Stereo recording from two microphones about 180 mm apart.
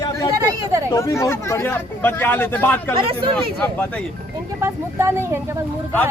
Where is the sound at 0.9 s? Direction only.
20° left (ahead or behind).